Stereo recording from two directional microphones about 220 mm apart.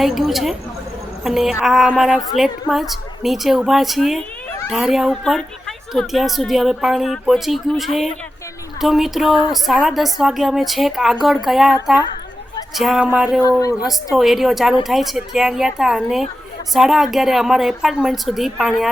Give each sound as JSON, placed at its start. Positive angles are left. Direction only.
{"t": 0.0, "sound": "speech", "side_deg": 0}
{"t": 13.4, "sound": "a woman's voice", "side_deg": 15}
{"t": 14.2, "sound": "speech", "side_deg": 0}